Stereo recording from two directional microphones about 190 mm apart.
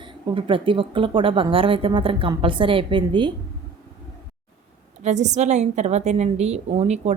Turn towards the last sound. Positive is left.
turn(degrees=-35)  # may be behind; listen again after turning